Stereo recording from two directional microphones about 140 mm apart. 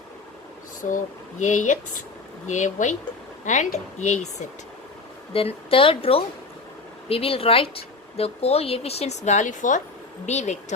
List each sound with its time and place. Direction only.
0.8 s speech: 65° left (ahead or behind)
5.3 s a woman's voice: 40° left (ahead or behind); by 9.8 s 65° left (ahead or behind)
10.2 s speech: 55° left (ahead or behind)